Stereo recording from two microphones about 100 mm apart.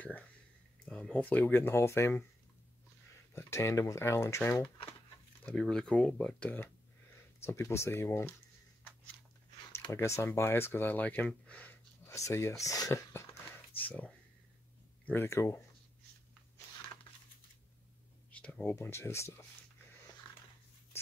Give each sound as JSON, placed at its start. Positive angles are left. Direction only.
{"t": 0.8, "sound": "speech", "side_deg": 10}
{"t": 3.3, "sound": "speech", "side_deg": 25}
{"t": 5.4, "sound": "speech", "side_deg": 10}
{"t": 7.4, "sound": "speech", "side_deg": 25}
{"t": 9.7, "sound": "speech", "side_deg": 30}
{"t": 12.0, "sound": "speech", "side_deg": 30}
{"t": 13.7, "sound": "speech", "side_deg": 15}
{"t": 18.3, "sound": "speech", "side_deg": 15}
{"t": 20.9, "sound": "a sound", "side_deg": 25}